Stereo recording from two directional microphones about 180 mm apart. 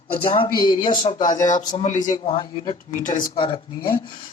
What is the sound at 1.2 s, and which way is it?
Speech, 45° left (ahead or behind).